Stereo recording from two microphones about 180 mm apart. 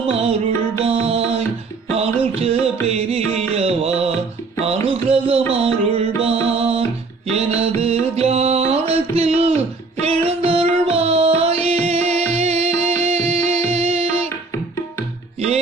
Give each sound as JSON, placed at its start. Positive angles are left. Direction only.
{"t": 0.1, "sound": "music", "side_deg": -35}